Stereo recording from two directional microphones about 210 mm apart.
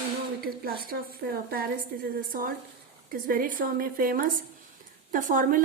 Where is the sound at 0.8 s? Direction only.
45° right (ahead or behind).